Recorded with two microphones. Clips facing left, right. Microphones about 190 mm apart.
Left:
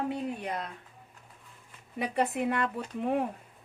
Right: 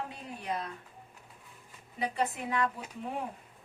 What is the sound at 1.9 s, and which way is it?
Speech, 60° left (ahead or behind).